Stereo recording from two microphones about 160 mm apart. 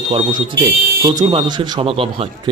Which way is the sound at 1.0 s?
25° right (ahead or behind).